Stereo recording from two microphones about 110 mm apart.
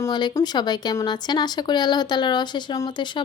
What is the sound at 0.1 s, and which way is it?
A woman's voice, 40° left (ahead or behind).